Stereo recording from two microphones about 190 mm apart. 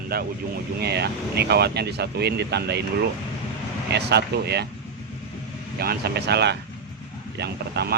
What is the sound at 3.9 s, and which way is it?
Speech, 60° right (ahead or behind).